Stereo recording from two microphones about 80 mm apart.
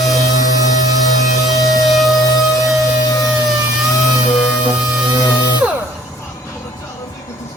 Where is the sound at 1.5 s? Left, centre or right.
Left.